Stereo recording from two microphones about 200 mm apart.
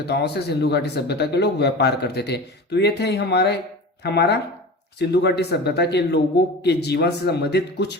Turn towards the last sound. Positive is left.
turn(degrees=55)  # may be behind; listen again after turning